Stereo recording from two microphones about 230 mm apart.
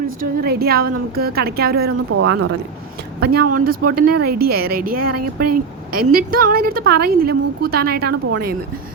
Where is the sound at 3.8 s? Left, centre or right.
Right.